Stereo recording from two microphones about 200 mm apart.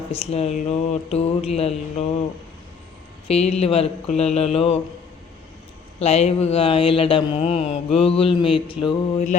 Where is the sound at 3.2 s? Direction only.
30° left (ahead or behind).